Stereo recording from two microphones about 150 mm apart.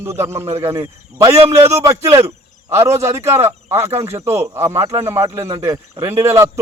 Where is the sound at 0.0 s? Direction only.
15° right (ahead or behind).